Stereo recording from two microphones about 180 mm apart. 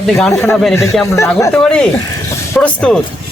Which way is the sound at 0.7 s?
15° left (ahead or behind).